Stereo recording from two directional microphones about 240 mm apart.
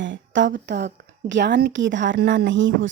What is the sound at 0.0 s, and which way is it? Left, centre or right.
Speech, right.